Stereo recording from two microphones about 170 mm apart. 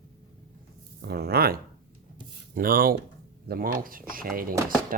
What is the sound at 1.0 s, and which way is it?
Speech, 65° right (ahead or behind).